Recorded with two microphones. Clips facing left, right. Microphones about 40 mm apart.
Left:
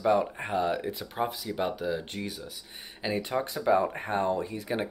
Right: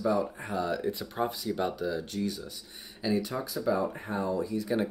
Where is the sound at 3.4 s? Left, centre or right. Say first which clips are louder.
Left 4 dB; left.